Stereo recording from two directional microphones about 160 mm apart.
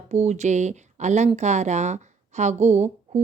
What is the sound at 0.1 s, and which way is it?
A woman's voice, 45° right (ahead or behind).